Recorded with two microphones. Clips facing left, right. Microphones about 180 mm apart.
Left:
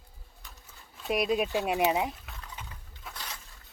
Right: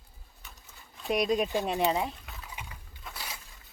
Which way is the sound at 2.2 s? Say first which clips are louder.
Right 1 dB; 5° right (ahead or behind).